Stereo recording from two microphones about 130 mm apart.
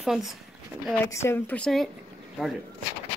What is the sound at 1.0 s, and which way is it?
Speech, 20° left (ahead or behind).